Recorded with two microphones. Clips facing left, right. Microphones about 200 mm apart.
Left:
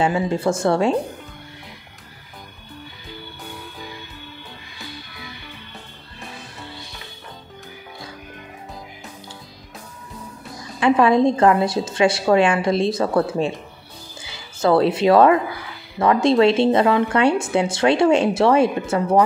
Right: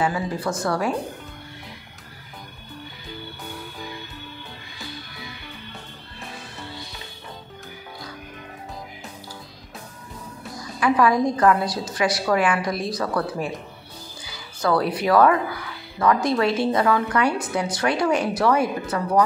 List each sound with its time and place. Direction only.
0.0 s a woman's voice: 25° left (ahead or behind)
10.8 s a woman's voice: 25° left (ahead or behind)